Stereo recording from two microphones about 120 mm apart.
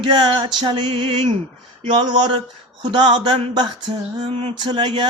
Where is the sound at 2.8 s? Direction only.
40° right (ahead or behind).